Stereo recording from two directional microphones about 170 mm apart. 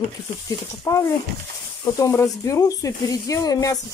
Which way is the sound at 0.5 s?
20° left (ahead or behind).